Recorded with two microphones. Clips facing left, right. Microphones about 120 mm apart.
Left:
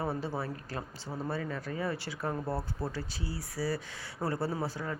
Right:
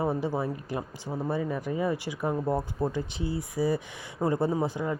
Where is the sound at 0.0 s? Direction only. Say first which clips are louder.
Right 6 dB; 15° right (ahead or behind).